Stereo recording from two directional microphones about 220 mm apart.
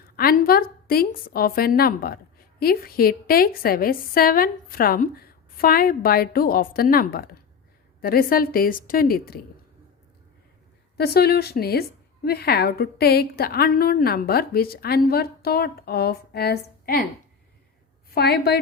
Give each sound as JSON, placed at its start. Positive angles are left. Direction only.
{"t": 0.2, "sound": "a woman's voice", "side_deg": 45}
{"t": 10.9, "sound": "a woman's voice", "side_deg": 45}
{"t": 18.1, "sound": "a woman's voice", "side_deg": 45}